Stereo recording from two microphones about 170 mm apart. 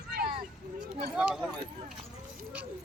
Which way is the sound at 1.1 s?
5° right (ahead or behind).